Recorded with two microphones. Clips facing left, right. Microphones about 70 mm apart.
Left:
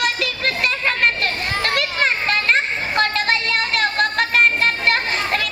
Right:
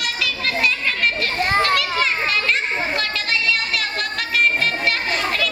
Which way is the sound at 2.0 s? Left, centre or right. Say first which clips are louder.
Left 1 dB; left.